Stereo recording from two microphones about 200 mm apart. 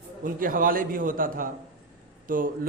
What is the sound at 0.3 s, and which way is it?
A man's voice, 45° right (ahead or behind).